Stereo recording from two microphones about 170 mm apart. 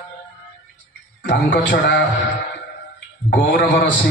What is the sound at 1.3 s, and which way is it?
Speech, 90° left.